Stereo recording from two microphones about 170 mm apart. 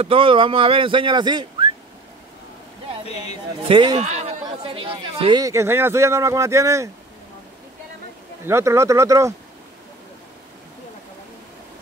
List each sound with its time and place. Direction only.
0.0 s speech: 30° right (ahead or behind)
3.6 s a man's voice: 25° right (ahead or behind)
4.0 s speech: 40° right (ahead or behind)
5.4 s speech: 15° right (ahead or behind)
8.5 s speech: 15° right (ahead or behind)